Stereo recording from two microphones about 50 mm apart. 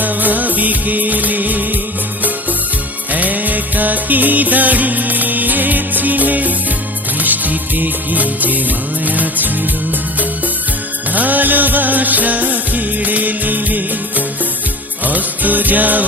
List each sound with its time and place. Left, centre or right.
0.0 s music: right
3.1 s music: right
11.1 s music: right